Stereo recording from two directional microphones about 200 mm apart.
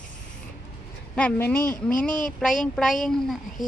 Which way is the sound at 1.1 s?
10° left (ahead or behind).